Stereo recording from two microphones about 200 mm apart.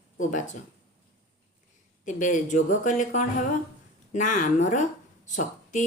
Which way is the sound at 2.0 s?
40° left (ahead or behind).